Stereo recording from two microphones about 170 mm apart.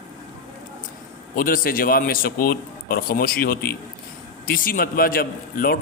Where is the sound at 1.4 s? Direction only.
55° left (ahead or behind).